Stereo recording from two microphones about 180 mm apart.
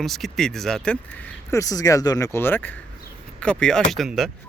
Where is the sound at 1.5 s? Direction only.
20° left (ahead or behind).